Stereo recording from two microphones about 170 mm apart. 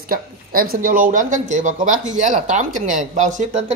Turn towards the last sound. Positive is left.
turn(degrees=-45)  # may be behind; listen again after turning